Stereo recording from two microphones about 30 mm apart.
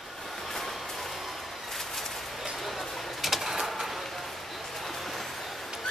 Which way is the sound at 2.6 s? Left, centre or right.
Centre.